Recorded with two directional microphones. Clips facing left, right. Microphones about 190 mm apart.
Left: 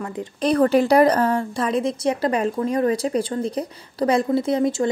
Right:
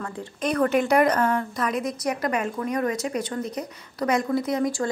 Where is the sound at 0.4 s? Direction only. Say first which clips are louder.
Left 5 dB; 35° left (ahead or behind).